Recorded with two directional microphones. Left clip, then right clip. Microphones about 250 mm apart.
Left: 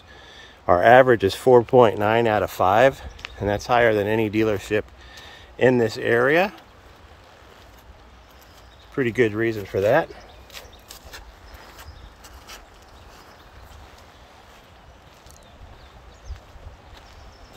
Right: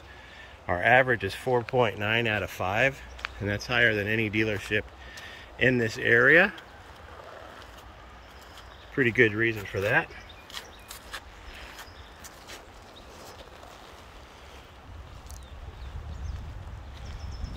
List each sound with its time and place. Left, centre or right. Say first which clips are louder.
0.4 s speech: left 10 dB; left
8.9 s speech: left 1 dB; centre